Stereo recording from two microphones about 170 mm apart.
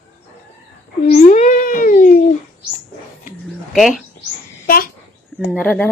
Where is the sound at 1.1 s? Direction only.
45° left (ahead or behind).